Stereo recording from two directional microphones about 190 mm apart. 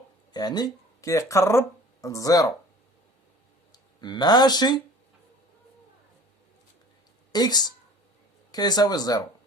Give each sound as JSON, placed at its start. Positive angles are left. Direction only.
{"t": 0.3, "sound": "speech", "side_deg": 20}
{"t": 3.7, "sound": "speech", "side_deg": 25}
{"t": 7.3, "sound": "speech", "side_deg": 20}